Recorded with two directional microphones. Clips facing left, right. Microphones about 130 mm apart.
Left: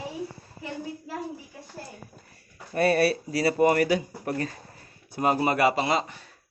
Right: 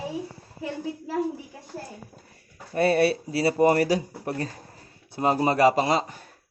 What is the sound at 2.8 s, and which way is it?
Speech, 25° right (ahead or behind).